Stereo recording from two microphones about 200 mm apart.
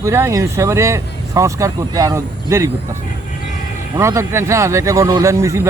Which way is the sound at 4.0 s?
15° right (ahead or behind).